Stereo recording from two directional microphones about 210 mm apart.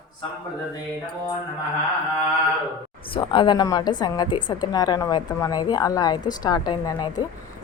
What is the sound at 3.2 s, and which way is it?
A woman's voice, 20° left (ahead or behind).